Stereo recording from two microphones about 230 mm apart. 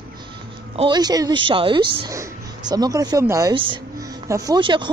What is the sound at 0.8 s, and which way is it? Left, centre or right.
Speech, centre.